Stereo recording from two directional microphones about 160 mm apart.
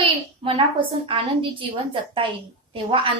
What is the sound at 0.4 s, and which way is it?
A woman's voice, 35° right (ahead or behind).